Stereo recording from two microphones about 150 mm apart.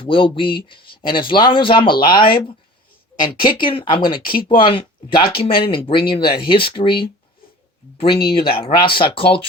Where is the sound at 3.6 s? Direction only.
35° left (ahead or behind).